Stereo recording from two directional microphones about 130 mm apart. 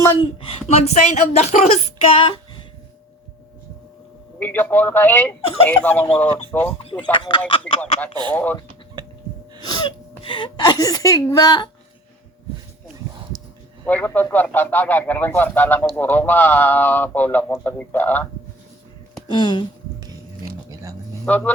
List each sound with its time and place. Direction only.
0.0 s speech: 35° left (ahead or behind); by 1.8 s 65° left (ahead or behind)
2.0 s female singing: 45° left (ahead or behind)
4.4 s speech: 15° left (ahead or behind)
6.8 s speech: 40° left (ahead or behind)
8.3 s speech: 10° left (ahead or behind)
9.6 s a woman's voice: 35° left (ahead or behind)
13.8 s speech: 15° left (ahead or behind)
19.3 s speech: 35° left (ahead or behind)
21.2 s speech: 15° left (ahead or behind)